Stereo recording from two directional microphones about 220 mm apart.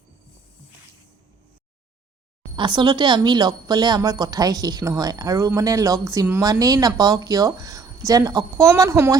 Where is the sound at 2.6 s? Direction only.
20° right (ahead or behind).